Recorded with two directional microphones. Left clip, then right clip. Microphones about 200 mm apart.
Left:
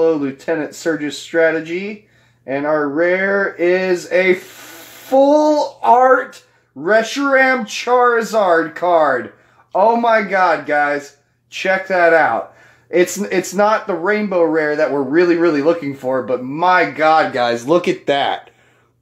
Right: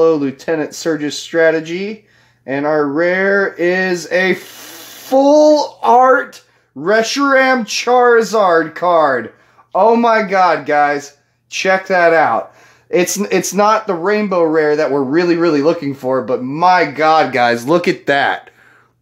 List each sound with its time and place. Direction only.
0.0 s speech: 40° right (ahead or behind)
5.2 s a sound: 15° right (ahead or behind)
5.8 s speech: 40° right (ahead or behind)